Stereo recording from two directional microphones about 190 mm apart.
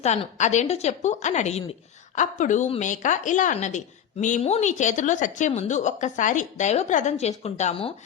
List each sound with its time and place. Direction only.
0.0 s a woman's voice: 35° left (ahead or behind)